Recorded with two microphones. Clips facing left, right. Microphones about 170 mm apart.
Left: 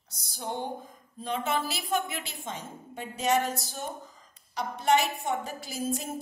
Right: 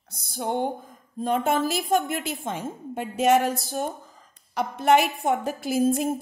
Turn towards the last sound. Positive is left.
turn(degrees=-50)  # may be behind; listen again after turning